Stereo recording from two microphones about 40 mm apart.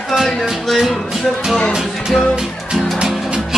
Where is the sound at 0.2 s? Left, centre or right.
Centre.